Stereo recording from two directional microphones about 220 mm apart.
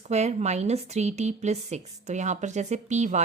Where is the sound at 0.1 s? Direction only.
30° right (ahead or behind).